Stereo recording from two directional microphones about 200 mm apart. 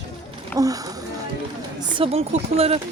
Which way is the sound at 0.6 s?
15° right (ahead or behind).